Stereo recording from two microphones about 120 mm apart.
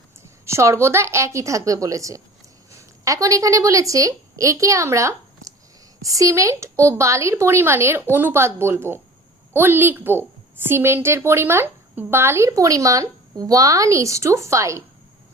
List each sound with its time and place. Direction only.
0.4 s a woman's voice: 25° right (ahead or behind)